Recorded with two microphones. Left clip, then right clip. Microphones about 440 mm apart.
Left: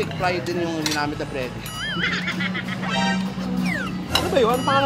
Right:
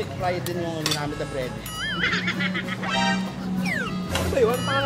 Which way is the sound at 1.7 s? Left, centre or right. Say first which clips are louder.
Even; centre.